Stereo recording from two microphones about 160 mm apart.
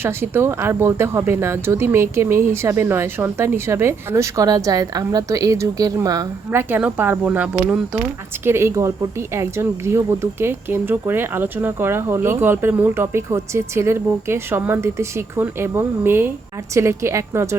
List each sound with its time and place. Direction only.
0.0 s speech: 15° right (ahead or behind)